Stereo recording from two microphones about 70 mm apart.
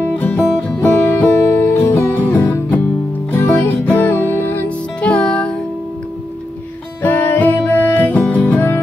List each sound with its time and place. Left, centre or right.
0.1 s music: left
0.9 s music: left
4.6 s music: centre
7.0 s music: left